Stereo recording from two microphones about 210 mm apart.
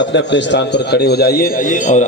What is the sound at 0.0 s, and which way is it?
A man's voice, 60° left (ahead or behind).